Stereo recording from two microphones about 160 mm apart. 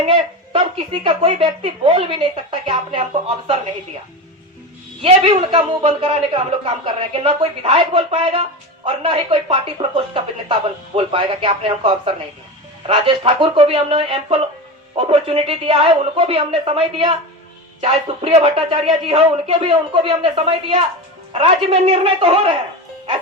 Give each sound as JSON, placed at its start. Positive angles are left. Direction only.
{"t": 0.0, "sound": "speech", "side_deg": -40}
{"t": 5.0, "sound": "speech", "side_deg": -35}